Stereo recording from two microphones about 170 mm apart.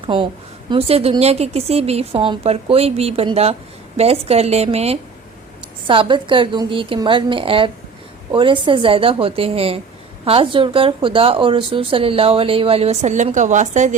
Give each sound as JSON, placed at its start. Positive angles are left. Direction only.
{"t": 0.7, "sound": "a woman's voice", "side_deg": -35}